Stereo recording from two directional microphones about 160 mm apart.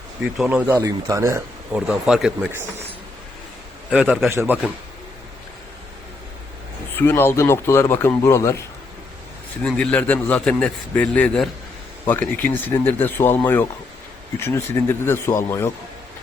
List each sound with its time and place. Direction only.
0.3 s a man's voice: 5° right (ahead or behind)
0.7 s speech: 20° right (ahead or behind)
1.7 s a man's voice: 5° right (ahead or behind)
3.8 s a man's voice: centre (ahead or behind)
4.3 s a man's voice: 15° right (ahead or behind)
6.9 s a man's voice: 15° left (ahead or behind)
9.6 s a man's voice: 5° left (ahead or behind)